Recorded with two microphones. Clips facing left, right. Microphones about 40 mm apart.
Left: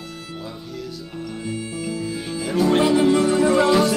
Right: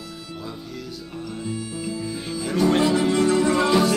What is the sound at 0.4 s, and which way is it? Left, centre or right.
Music, centre.